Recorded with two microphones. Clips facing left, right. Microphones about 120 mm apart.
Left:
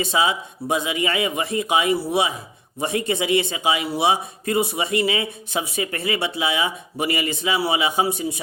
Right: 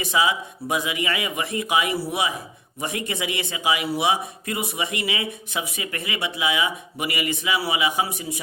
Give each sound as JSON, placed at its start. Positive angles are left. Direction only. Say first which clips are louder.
{"t": 0.0, "sound": "speech", "louder": "left 1 dB", "side_deg": 30}